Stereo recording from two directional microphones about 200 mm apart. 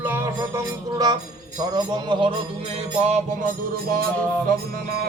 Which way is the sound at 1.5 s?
20° right (ahead or behind).